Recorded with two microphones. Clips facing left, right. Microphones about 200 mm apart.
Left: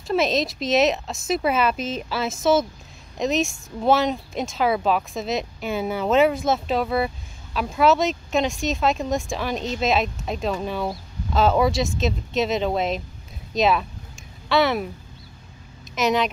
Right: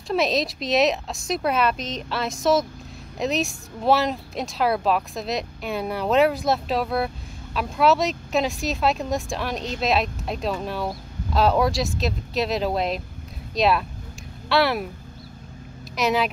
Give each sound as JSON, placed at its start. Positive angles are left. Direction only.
{"t": 0.1, "sound": "speech", "side_deg": 0}
{"t": 16.0, "sound": "speech", "side_deg": 0}